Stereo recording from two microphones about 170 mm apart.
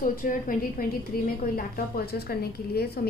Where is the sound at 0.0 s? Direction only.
55° left (ahead or behind).